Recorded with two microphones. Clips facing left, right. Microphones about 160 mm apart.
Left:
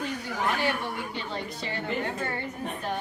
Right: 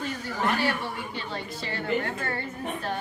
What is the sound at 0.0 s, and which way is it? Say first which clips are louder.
Chuckle: right 1 dB; 15° left (ahead or behind).